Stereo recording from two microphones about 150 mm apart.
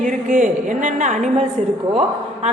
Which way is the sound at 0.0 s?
60° right (ahead or behind).